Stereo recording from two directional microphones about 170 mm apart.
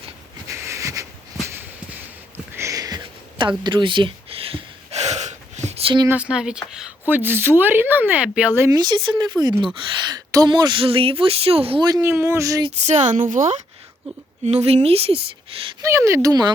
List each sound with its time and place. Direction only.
0.4 s a sound: 15° right (ahead or behind)
3.6 s gasp: 25° right (ahead or behind)
6.1 s speech: 5° right (ahead or behind); by 11.9 s 30° right (ahead or behind)
11.9 s speech: 15° right (ahead or behind)
12.6 s a woman's voice: 40° right (ahead or behind)
14.4 s speech: 40° right (ahead or behind)
15.8 s speech: 15° right (ahead or behind)